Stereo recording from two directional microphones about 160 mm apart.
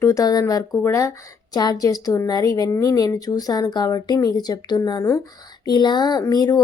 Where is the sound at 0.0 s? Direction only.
20° left (ahead or behind).